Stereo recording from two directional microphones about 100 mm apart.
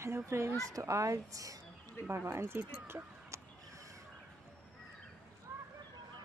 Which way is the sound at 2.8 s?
25° right (ahead or behind).